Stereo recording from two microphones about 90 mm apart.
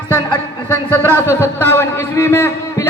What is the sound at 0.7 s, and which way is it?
A man's voice, 20° left (ahead or behind).